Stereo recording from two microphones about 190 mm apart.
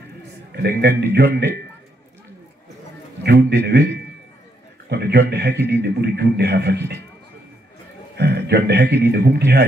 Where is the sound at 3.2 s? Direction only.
60° right (ahead or behind).